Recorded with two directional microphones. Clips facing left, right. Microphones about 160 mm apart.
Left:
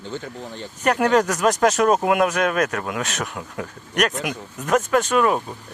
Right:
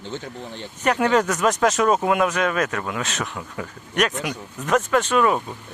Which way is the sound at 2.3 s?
50° left (ahead or behind).